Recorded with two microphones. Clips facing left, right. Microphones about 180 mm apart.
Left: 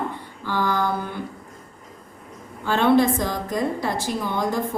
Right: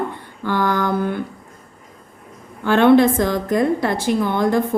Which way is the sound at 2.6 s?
70° right (ahead or behind).